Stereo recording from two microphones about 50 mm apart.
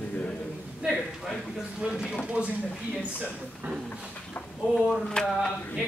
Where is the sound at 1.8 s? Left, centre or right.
Centre.